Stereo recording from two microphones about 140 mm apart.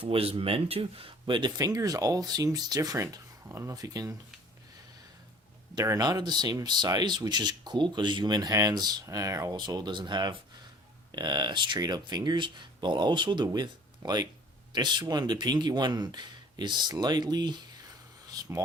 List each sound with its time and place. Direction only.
0.0 s speech: 40° right (ahead or behind); by 4.1 s 25° right (ahead or behind)
5.7 s speech: 25° right (ahead or behind)
18.3 s a sound: 25° right (ahead or behind)